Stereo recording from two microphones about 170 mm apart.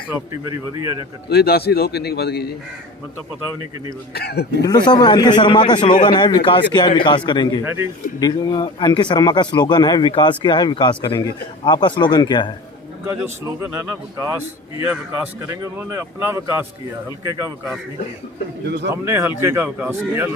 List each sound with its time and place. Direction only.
0.1 s a man's voice: 15° right (ahead or behind)
1.3 s a man's voice: 70° left (ahead or behind)
4.1 s a man's voice: 70° left (ahead or behind)
4.6 s speech: 25° left (ahead or behind)
7.6 s a man's voice: 15° right (ahead or behind)
8.2 s speech: 25° left (ahead or behind)
13.1 s a man's voice: 15° right (ahead or behind)
19.0 s a man's voice: 15° right (ahead or behind)